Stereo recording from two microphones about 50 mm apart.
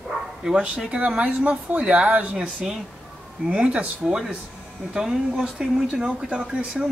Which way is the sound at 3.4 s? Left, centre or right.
Right.